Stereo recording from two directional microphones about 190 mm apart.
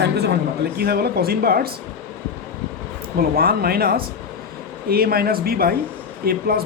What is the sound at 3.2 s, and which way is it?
Speech, 50° right (ahead or behind).